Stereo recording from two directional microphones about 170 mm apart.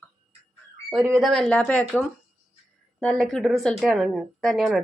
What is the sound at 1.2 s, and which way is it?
A woman's voice, 5° left (ahead or behind).